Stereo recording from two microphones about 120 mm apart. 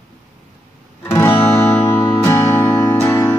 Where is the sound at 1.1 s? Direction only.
20° left (ahead or behind).